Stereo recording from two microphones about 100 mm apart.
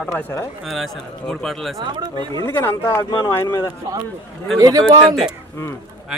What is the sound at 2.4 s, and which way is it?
Speech, 25° left (ahead or behind).